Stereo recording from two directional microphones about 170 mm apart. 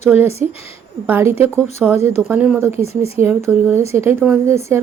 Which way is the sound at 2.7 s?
35° left (ahead or behind).